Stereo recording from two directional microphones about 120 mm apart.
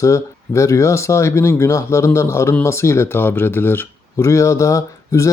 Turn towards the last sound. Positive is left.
turn(degrees=25)  # may be behind; listen again after turning